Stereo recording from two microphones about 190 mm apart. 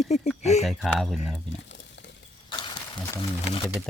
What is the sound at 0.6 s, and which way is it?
Speech, centre (ahead or behind).